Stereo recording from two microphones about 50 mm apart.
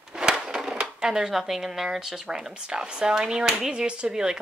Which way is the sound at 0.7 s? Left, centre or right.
Centre.